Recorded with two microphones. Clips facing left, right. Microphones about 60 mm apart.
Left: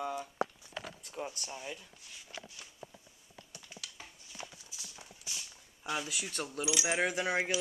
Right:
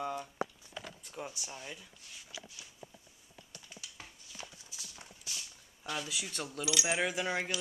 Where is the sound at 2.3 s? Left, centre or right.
Left.